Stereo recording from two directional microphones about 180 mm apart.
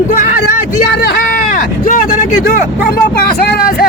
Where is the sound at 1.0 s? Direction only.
55° left (ahead or behind).